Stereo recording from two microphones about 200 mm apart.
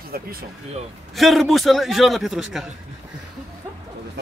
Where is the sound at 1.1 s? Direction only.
Centre (ahead or behind).